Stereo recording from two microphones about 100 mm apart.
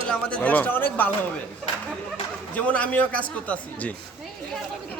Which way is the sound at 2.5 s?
15° left (ahead or behind).